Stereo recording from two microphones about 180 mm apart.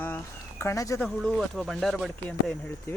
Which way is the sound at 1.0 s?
Centre (ahead or behind).